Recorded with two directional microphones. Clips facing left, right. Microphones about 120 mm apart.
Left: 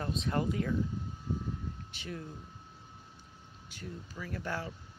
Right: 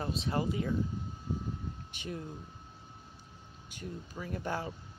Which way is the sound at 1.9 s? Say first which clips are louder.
Right 3 dB; 15° right (ahead or behind).